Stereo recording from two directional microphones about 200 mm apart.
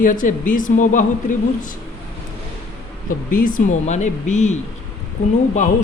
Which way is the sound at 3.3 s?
40° left (ahead or behind).